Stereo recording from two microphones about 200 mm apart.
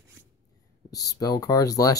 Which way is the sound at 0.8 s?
20° left (ahead or behind).